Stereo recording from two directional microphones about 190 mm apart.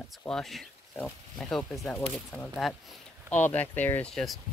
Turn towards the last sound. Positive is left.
turn(degrees=0)  # may be behind; listen again after turning